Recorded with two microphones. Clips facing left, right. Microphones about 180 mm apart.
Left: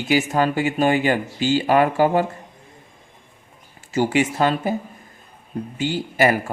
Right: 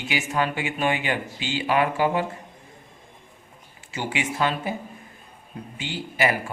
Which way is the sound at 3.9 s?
40° left (ahead or behind).